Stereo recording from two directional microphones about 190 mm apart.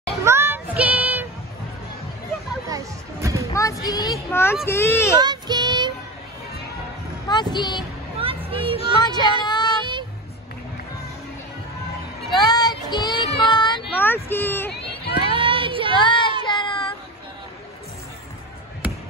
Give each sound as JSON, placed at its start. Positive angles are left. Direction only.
{"t": 0.2, "sound": "child singing", "side_deg": -15}
{"t": 2.7, "sound": "music", "side_deg": -15}
{"t": 3.5, "sound": "child singing", "side_deg": 20}
{"t": 4.6, "sound": "speech", "side_deg": 15}
{"t": 5.2, "sound": "child singing", "side_deg": -20}
{"t": 7.2, "sound": "speech", "side_deg": 25}
{"t": 8.2, "sound": "a sound", "side_deg": -30}
{"t": 9.0, "sound": "a sound", "side_deg": 25}
{"t": 9.8, "sound": "child singing", "side_deg": -25}
{"t": 12.3, "sound": "child singing", "side_deg": 20}
{"t": 13.9, "sound": "speech", "side_deg": 10}
{"t": 15.1, "sound": "a sound", "side_deg": -25}
{"t": 15.9, "sound": "a sound", "side_deg": 25}
{"t": 16.4, "sound": "child singing", "side_deg": 25}